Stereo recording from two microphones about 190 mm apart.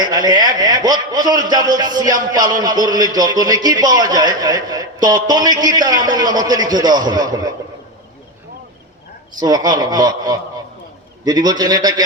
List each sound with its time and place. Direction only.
0.0 s a man's voice: 20° right (ahead or behind)
9.4 s a man's voice: 20° right (ahead or behind)